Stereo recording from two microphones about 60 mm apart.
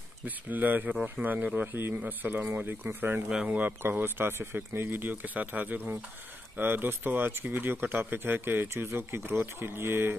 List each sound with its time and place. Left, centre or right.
0.2 s speech: right
1.7 s speech: right
2.0 s speech: right
3.8 s speech: right